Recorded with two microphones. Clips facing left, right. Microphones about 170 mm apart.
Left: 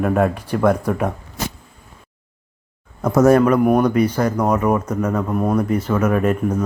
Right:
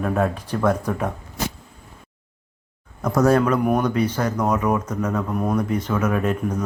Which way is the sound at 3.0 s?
25° left (ahead or behind).